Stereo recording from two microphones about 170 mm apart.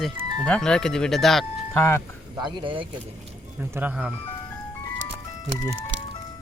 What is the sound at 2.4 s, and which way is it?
Speech, 30° right (ahead or behind).